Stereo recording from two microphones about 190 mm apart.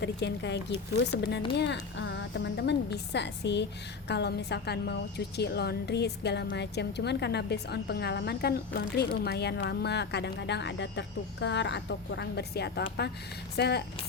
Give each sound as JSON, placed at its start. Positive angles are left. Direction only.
{"t": 0.0, "sound": "a woman's voice", "side_deg": 65}